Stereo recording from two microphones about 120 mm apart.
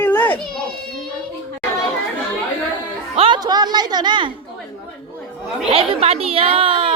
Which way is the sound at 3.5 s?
35° right (ahead or behind).